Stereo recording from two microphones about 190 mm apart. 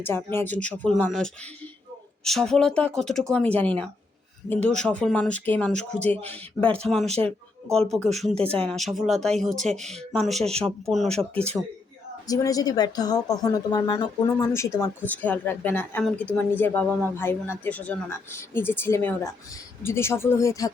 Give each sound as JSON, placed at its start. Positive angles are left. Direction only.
{"t": 0.0, "sound": "speech", "side_deg": 10}
{"t": 12.3, "sound": "speech", "side_deg": 20}